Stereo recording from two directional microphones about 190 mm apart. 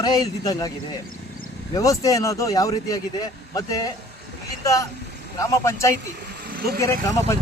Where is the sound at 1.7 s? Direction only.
15° left (ahead or behind).